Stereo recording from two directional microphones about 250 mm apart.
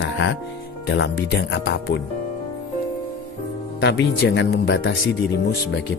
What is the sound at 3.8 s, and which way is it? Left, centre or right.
Speech, left.